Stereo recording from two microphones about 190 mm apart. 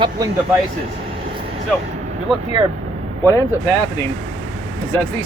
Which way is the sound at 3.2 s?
15° left (ahead or behind).